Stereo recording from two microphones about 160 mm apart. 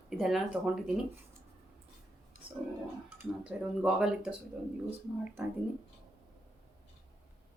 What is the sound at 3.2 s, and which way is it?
A woman's voice, 5° right (ahead or behind).